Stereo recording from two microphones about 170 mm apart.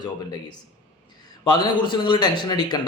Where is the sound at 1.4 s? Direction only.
25° left (ahead or behind).